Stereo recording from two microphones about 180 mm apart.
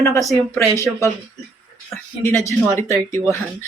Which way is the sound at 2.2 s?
15° left (ahead or behind).